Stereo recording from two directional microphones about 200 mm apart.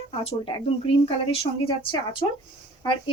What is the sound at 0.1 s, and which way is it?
Speech, 30° left (ahead or behind).